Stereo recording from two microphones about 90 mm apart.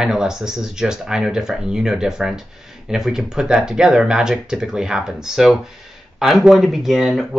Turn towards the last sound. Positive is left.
turn(degrees=0)  # may be behind; listen again after turning